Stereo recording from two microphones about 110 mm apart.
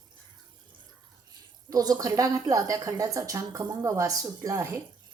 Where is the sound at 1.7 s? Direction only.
35° right (ahead or behind).